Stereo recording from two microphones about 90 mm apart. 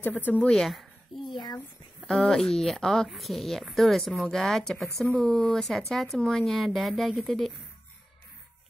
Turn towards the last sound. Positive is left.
turn(degrees=0)  # may be behind; listen again after turning